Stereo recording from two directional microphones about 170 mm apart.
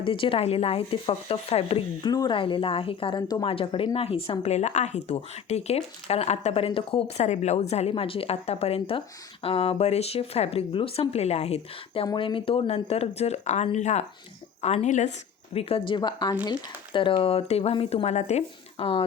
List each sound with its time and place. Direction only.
0.0 s speech: 30° left (ahead or behind)
12.0 s speech: 30° left (ahead or behind)
15.9 s a woman's voice: 25° left (ahead or behind)